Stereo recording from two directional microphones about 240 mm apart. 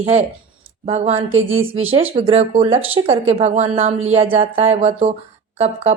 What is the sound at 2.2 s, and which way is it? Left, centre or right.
Speech, right.